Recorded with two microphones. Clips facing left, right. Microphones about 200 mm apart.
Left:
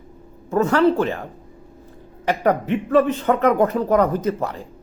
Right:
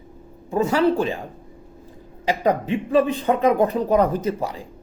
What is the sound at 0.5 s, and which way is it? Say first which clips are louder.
Speech: left 2 dB; 10° right (ahead or behind).